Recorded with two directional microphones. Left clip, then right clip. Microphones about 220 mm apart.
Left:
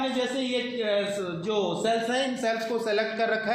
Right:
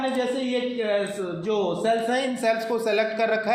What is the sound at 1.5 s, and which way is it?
A man's voice, 20° right (ahead or behind).